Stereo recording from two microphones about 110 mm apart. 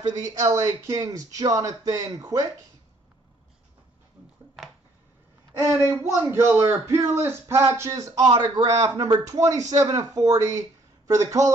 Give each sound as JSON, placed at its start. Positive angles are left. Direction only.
{"t": 0.5, "sound": "speech", "side_deg": -30}
{"t": 5.7, "sound": "a woman's voice", "side_deg": 30}
{"t": 6.0, "sound": "speech", "side_deg": -25}